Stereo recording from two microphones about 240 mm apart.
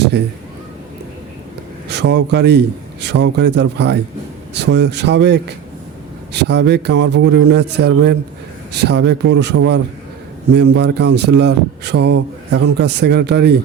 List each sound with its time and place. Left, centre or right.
1.9 s speech: right